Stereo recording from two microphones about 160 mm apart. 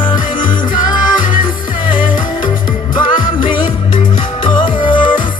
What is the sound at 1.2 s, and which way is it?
Music, 55° left (ahead or behind).